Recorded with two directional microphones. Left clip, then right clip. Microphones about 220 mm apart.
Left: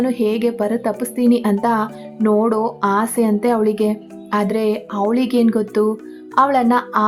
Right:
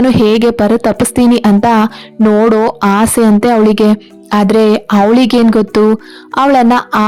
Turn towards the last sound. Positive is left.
turn(degrees=-40)  # may be behind; listen again after turning